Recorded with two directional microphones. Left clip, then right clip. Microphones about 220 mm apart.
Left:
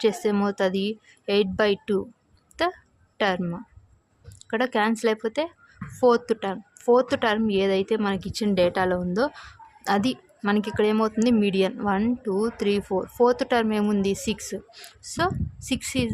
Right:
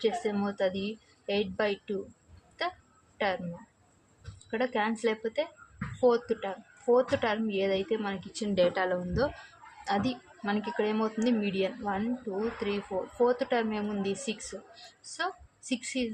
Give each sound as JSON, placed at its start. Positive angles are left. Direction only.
{"t": 0.0, "sound": "a woman's voice", "side_deg": 50}
{"t": 3.2, "sound": "speech", "side_deg": 45}
{"t": 4.5, "sound": "a woman's voice", "side_deg": 45}